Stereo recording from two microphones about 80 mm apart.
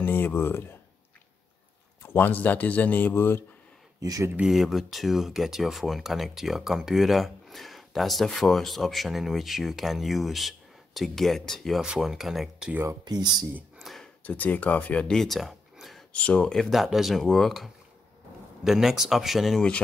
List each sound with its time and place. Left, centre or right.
0.0 s speech: left
2.0 s speech: left
4.0 s speech: right
4.5 s speech: centre
11.8 s speech: centre
13.0 s speech: right
13.7 s a sound: centre
14.2 s speech: left; by 16.0 s centre
16.1 s speech: centre
16.7 s speech: centre